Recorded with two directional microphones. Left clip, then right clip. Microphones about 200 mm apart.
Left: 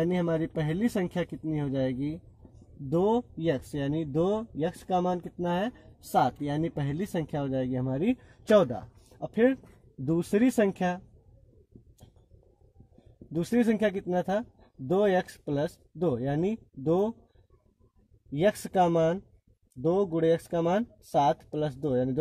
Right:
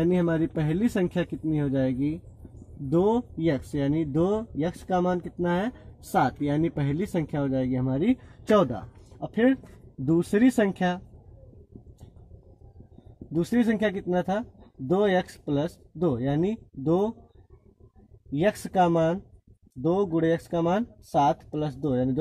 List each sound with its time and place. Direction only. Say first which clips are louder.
0.1 s speech: right 3 dB; 30° left (ahead or behind)
13.3 s speech: right 1 dB; 40° left (ahead or behind)
18.3 s speech: right 1 dB; 40° left (ahead or behind)